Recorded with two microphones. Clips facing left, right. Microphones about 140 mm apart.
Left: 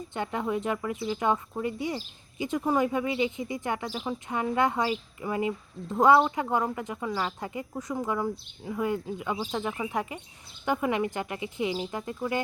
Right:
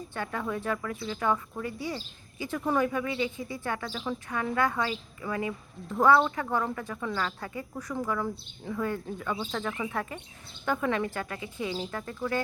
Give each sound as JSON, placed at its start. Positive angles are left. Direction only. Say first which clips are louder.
{"t": 0.1, "sound": "speech", "louder": "left 4 dB", "side_deg": 20}